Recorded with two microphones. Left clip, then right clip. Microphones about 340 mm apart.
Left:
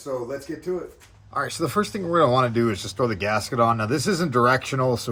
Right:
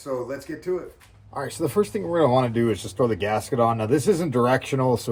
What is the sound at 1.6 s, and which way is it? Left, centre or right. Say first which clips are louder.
Speech: right 6 dB; left.